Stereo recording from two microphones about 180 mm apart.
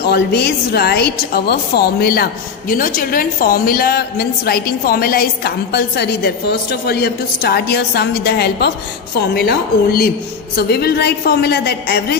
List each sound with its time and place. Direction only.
0.1 s a woman's voice: 65° left (ahead or behind)